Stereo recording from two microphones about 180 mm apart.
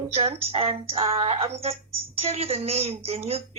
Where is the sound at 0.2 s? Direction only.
35° right (ahead or behind).